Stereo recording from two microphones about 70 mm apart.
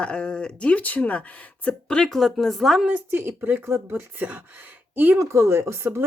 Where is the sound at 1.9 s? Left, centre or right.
Centre.